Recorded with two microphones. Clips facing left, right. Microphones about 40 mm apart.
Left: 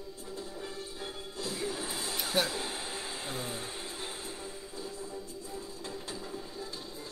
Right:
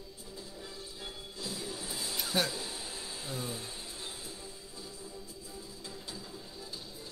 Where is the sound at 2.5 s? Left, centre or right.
Left.